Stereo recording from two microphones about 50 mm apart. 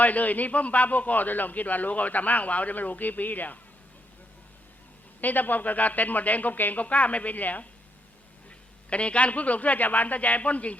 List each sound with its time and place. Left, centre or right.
0.0 s a man's voice: left
5.2 s a man's voice: left